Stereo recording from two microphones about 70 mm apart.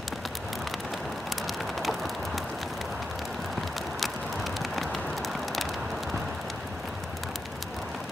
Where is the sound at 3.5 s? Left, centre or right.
Centre.